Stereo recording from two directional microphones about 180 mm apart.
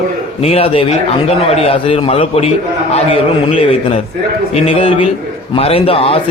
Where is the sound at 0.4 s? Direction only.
35° left (ahead or behind).